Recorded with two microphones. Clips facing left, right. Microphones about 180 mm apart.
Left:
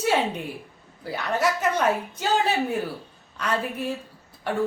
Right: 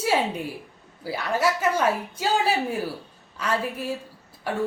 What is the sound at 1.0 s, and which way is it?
A woman's voice, 5° right (ahead or behind).